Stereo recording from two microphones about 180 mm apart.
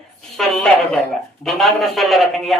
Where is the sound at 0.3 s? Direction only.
Centre (ahead or behind).